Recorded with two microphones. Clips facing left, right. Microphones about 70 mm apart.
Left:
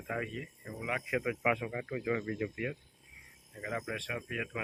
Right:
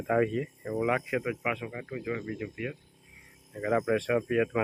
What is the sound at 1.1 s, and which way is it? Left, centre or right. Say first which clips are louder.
Speech: right 1 dB; centre.